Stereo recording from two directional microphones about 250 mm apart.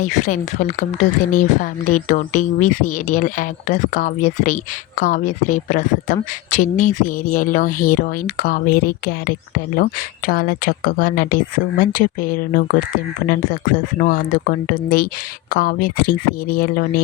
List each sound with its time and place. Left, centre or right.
0.0 s speech: left